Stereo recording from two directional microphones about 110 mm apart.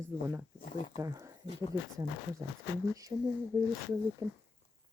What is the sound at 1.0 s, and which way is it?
Speech, 25° right (ahead or behind).